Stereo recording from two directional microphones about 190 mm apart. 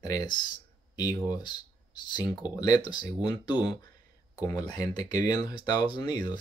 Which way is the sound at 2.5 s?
20° left (ahead or behind).